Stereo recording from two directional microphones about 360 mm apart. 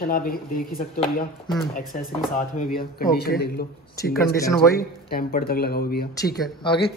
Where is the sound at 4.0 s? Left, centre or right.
Centre.